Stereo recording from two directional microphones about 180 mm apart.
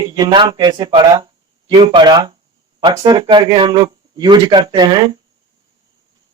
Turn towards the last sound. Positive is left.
turn(degrees=-25)  # may be behind; listen again after turning